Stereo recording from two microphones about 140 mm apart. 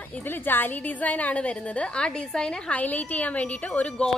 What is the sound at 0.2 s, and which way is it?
Speech, 15° left (ahead or behind).